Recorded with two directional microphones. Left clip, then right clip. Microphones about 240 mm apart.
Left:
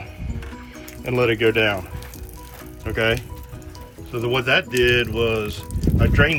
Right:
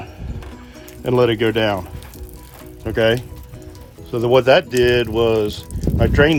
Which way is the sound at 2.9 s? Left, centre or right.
Right.